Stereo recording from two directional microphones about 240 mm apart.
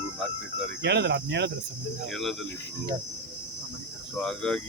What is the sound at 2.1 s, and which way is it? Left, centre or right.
Speech, centre.